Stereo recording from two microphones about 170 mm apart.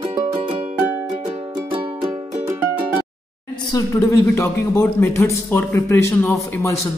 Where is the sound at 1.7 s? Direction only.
30° right (ahead or behind).